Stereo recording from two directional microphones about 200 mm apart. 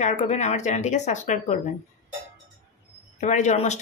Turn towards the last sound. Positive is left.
turn(degrees=35)  # may be behind; listen again after turning